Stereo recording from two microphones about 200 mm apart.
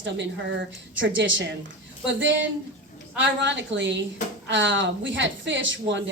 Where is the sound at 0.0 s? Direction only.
65° right (ahead or behind).